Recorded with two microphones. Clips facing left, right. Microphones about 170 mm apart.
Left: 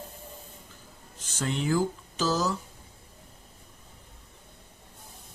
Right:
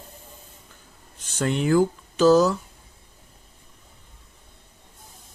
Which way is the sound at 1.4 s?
60° right (ahead or behind).